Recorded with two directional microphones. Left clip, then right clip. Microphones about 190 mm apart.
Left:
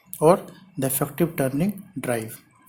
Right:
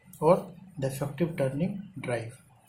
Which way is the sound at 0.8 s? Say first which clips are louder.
Left 7 dB; 55° left (ahead or behind).